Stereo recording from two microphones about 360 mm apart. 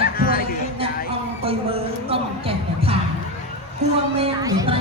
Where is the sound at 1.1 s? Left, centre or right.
Centre.